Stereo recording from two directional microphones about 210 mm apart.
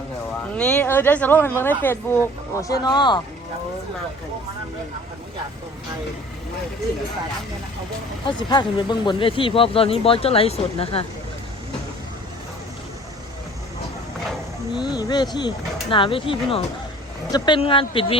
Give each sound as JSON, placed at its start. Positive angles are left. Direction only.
{"t": 0.5, "sound": "speech", "side_deg": 5}
{"t": 8.3, "sound": "speech", "side_deg": 20}
{"t": 14.8, "sound": "speech", "side_deg": 20}